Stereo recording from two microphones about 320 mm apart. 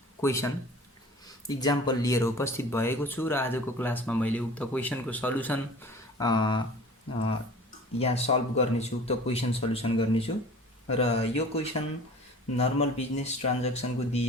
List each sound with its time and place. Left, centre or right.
0.2 s speech: centre
7.9 s a man's voice: centre